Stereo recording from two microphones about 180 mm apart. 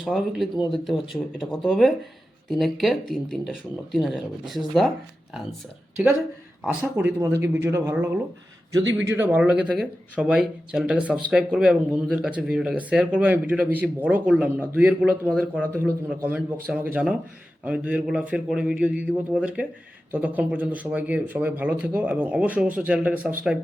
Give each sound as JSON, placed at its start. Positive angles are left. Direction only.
{"t": 0.0, "sound": "speech", "side_deg": 0}
{"t": 6.9, "sound": "speech", "side_deg": -10}